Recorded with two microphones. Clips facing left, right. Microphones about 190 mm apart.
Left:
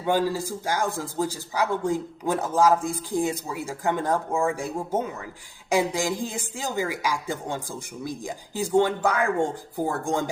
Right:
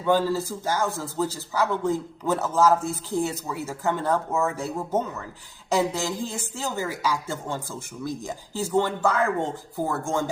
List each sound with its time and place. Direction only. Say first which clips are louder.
0.0 s a woman's voice: right 1 dB; 15° left (ahead or behind)